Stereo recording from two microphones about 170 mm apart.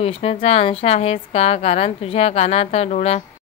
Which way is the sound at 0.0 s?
35° left (ahead or behind).